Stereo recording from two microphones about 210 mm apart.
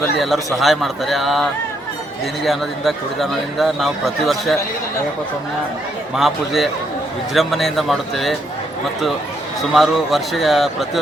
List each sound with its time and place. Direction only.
0.2 s a man's voice: centre (ahead or behind)
6.1 s a man's voice: centre (ahead or behind)
9.7 s a man's voice: centre (ahead or behind)